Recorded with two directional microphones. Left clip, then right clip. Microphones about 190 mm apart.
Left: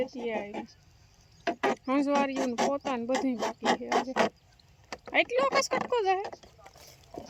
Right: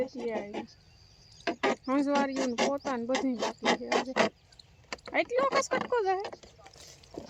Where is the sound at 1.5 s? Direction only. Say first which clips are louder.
Left 1 dB; 35° left (ahead or behind).